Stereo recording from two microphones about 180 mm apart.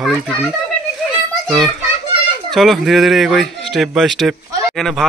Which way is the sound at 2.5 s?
Centre (ahead or behind).